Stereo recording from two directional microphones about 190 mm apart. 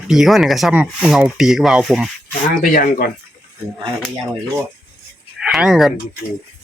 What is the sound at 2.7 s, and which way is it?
Speech, 45° left (ahead or behind).